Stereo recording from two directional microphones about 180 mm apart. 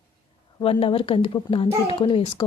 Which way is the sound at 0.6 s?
30° left (ahead or behind).